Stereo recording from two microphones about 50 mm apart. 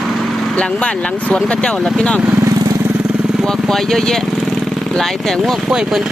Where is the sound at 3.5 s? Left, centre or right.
Centre.